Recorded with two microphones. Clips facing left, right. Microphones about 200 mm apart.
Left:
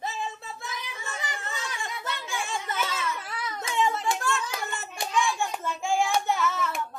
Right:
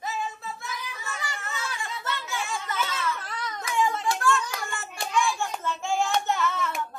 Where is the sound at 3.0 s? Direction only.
10° left (ahead or behind).